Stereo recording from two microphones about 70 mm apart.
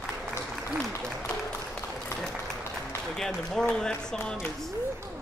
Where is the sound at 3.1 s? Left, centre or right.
Centre.